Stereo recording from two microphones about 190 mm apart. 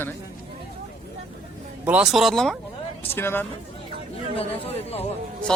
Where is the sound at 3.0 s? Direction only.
10° left (ahead or behind).